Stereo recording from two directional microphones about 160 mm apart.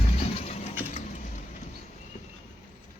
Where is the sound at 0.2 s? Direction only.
45° left (ahead or behind).